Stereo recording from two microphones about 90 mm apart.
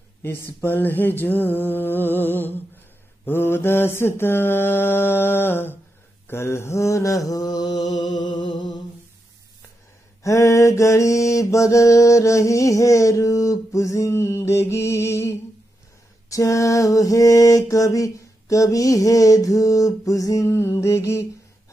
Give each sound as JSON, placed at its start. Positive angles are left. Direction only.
{"t": 0.6, "sound": "mantra", "side_deg": 25}
{"t": 8.1, "sound": "music", "side_deg": 55}
{"t": 10.2, "sound": "mantra", "side_deg": 35}